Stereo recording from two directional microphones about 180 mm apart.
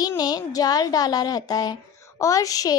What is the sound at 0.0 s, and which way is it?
A child's voice, 20° left (ahead or behind).